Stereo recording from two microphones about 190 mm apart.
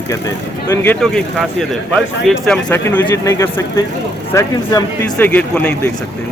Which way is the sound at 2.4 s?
10° left (ahead or behind).